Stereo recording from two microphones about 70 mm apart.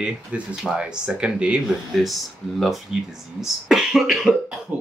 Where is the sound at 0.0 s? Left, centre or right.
Centre.